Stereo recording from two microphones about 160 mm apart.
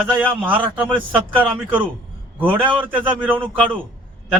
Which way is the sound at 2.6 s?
10° right (ahead or behind).